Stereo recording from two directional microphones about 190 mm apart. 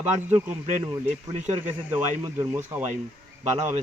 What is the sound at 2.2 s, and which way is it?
Speech, 15° right (ahead or behind).